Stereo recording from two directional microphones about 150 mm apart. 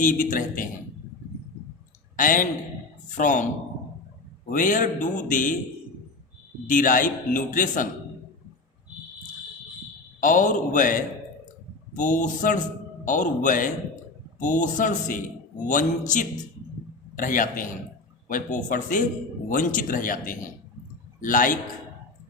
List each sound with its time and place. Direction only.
0.0 s a man's voice: 60° left (ahead or behind)
2.1 s a man's voice: 60° left (ahead or behind)
4.4 s a man's voice: 60° left (ahead or behind)
6.7 s a man's voice: 65° left (ahead or behind)
10.2 s a man's voice: 60° left (ahead or behind)